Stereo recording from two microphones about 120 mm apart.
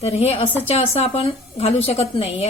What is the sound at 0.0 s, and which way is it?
A woman's voice, 60° left (ahead or behind).